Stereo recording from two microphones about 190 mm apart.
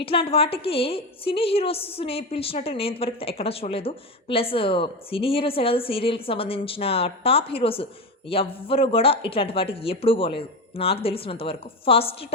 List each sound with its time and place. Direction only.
0.0 s a woman's voice: 30° left (ahead or behind)